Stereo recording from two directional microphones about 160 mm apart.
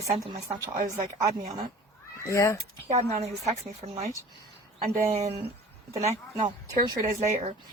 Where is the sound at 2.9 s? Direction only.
40° right (ahead or behind).